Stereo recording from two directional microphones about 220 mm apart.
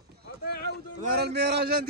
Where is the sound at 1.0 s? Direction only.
45° right (ahead or behind).